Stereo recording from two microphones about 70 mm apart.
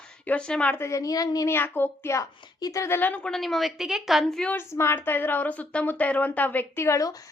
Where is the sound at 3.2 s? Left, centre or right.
Centre.